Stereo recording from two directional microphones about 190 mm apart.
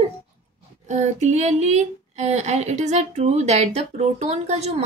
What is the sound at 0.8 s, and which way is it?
A child's voice, 40° right (ahead or behind).